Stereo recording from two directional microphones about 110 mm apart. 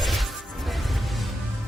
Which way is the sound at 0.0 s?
Centre (ahead or behind).